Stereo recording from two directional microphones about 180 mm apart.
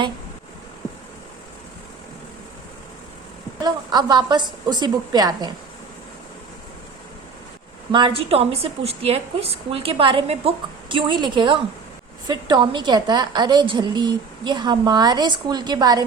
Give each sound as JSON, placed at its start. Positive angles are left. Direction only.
{"t": 3.6, "sound": "a woman's voice", "side_deg": -25}
{"t": 7.9, "sound": "a woman's voice", "side_deg": -30}